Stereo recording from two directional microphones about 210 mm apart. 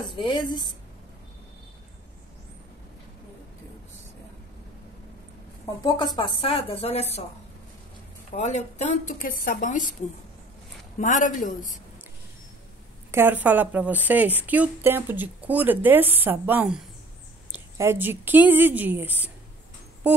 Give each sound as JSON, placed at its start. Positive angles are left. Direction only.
{"t": 0.1, "sound": "speech", "side_deg": 25}
{"t": 5.8, "sound": "speech", "side_deg": 20}
{"t": 8.4, "sound": "speech", "side_deg": 35}
{"t": 11.0, "sound": "speech", "side_deg": 35}
{"t": 13.1, "sound": "a woman's voice", "side_deg": -10}